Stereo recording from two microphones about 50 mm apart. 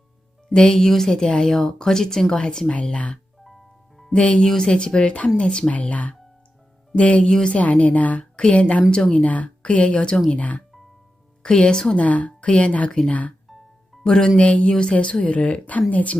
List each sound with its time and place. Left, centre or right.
0.5 s speech: centre
4.1 s a woman's voice: left
5.7 s a woman's voice: left
7.3 s speech: centre
7.5 s a woman's voice: left
8.2 s a woman's voice: centre
9.1 s a woman's voice: left
11.4 s speech: centre
11.9 s a woman's voice: left
14.0 s a woman's voice: centre; by 16.1 s left